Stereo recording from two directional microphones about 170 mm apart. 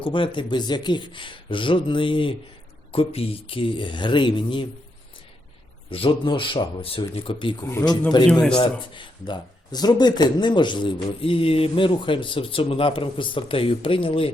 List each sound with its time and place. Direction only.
0.0 s speech: 30° left (ahead or behind)
5.9 s speech: 30° left (ahead or behind)
7.6 s speech: 15° left (ahead or behind)
8.3 s speech: 5° left (ahead or behind)
9.0 s speech: 25° left (ahead or behind)